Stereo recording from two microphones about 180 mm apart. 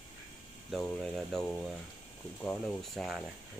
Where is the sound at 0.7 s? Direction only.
5° left (ahead or behind).